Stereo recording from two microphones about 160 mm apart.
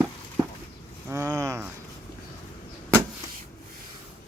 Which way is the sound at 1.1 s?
20° right (ahead or behind).